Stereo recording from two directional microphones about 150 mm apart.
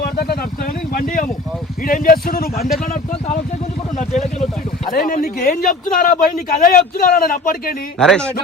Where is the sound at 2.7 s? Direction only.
65° left (ahead or behind).